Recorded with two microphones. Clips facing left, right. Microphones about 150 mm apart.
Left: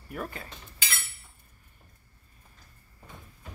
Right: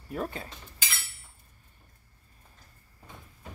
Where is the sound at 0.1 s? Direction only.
25° right (ahead or behind).